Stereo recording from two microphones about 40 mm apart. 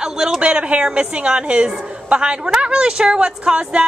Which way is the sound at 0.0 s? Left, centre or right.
Centre.